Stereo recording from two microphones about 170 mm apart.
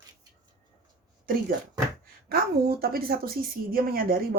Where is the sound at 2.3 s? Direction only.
65° right (ahead or behind).